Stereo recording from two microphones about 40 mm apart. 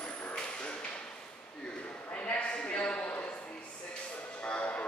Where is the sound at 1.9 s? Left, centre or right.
Left.